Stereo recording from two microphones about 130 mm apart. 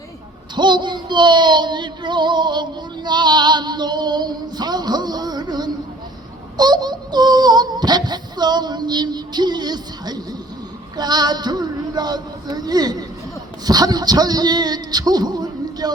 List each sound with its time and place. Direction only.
0.5 s child singing: 35° right (ahead or behind)
6.6 s female singing: 35° right (ahead or behind)
10.9 s speech: 30° right (ahead or behind)